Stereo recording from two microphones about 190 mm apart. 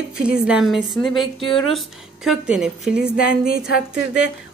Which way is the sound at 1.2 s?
25° left (ahead or behind).